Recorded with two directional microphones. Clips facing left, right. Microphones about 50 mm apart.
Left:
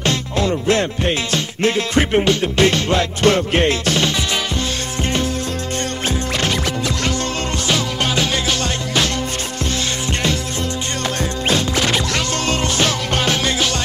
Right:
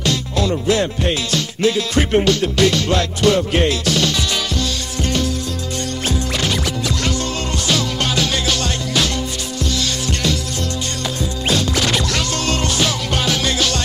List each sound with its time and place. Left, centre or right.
0.0 s music: left
2.1 s music: left
3.2 s music: left
6.3 s music: left
7.6 s music: left
11.4 s music: left
12.8 s music: left